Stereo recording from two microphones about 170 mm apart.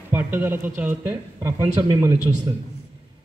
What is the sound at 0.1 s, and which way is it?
A man's voice, 10° right (ahead or behind).